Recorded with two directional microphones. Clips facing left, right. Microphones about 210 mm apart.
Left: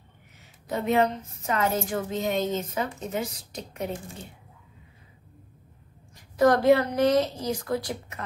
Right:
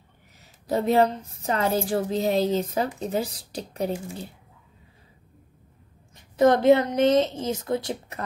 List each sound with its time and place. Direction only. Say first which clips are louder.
0.4 s a woman's voice: right 5 dB; 35° right (ahead or behind)
6.1 s a woman's voice: right 2 dB; 25° right (ahead or behind)